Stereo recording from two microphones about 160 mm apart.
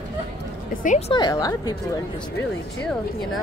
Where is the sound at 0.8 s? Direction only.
55° left (ahead or behind).